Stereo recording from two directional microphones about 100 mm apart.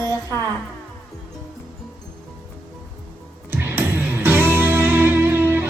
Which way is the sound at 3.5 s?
25° right (ahead or behind).